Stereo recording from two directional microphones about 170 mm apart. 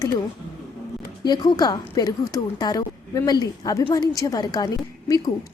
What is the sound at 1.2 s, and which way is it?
Speech, 25° left (ahead or behind).